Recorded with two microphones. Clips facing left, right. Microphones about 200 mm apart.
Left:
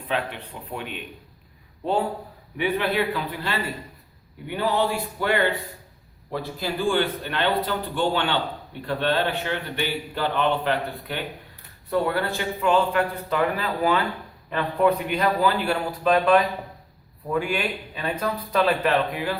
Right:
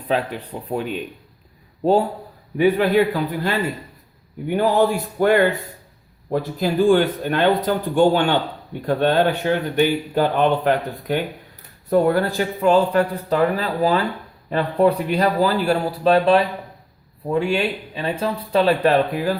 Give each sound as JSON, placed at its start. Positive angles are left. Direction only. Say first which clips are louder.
{"t": 0.1, "sound": "speech", "louder": "right 6 dB", "side_deg": -40}
{"t": 2.6, "sound": "speech", "louder": "right 8 dB", "side_deg": -40}